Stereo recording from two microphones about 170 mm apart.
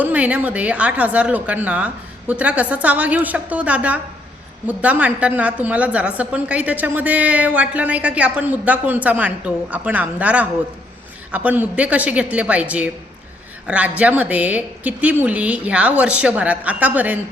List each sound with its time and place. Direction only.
0.0 s a woman's voice: 10° right (ahead or behind)